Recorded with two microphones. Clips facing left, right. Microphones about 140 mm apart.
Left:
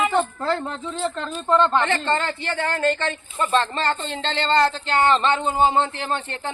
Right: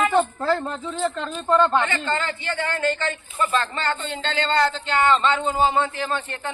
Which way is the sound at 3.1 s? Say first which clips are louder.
Left 1 dB; 25° left (ahead or behind).